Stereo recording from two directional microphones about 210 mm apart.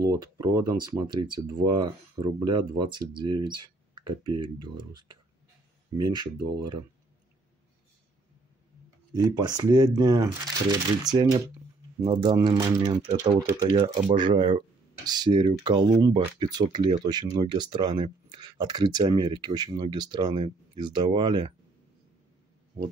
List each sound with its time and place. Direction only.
0.0 s speech: 15° right (ahead or behind)
9.1 s speech: 20° right (ahead or behind)